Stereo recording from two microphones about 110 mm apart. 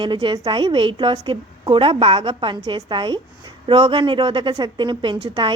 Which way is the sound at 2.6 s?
40° right (ahead or behind).